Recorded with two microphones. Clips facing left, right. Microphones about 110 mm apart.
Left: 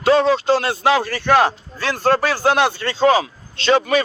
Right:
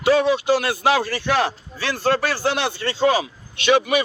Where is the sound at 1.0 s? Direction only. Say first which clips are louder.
Left 5 dB; 55° left (ahead or behind).